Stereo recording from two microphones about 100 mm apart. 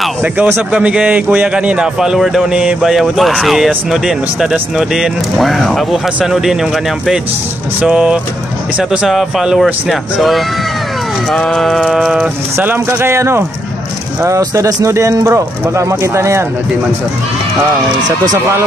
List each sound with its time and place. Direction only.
0.7 s a man's voice: 10° right (ahead or behind)
11.3 s a man's voice: 5° left (ahead or behind)
12.5 s speech: 20° right (ahead or behind)
18.0 s speech: 40° right (ahead or behind)